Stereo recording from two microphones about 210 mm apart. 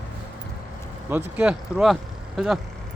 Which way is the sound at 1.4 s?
5° right (ahead or behind).